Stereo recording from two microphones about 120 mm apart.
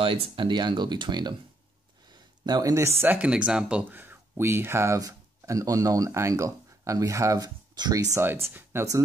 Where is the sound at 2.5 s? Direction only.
30° right (ahead or behind).